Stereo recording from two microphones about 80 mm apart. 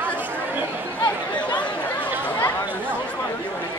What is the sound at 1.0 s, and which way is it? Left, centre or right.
Chatter, left.